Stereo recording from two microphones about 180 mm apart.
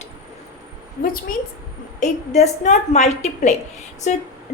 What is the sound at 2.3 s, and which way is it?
A woman's voice, 40° left (ahead or behind).